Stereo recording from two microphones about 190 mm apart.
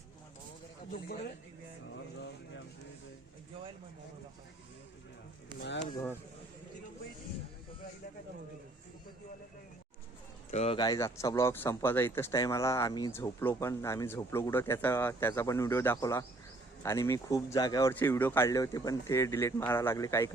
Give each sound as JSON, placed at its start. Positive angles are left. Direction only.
{"t": 5.5, "sound": "speech", "side_deg": 65}
{"t": 10.5, "sound": "speech", "side_deg": 35}
{"t": 10.8, "sound": "speech", "side_deg": 20}